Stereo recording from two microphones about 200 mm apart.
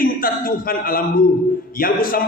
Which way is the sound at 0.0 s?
45° left (ahead or behind).